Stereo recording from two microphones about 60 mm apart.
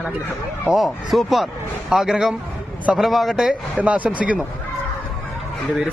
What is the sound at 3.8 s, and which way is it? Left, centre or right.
Speech, right.